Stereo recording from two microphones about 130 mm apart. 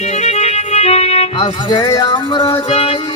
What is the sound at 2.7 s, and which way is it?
Music, 50° left (ahead or behind).